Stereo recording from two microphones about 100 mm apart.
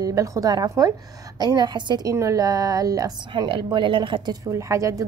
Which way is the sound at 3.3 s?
50° right (ahead or behind).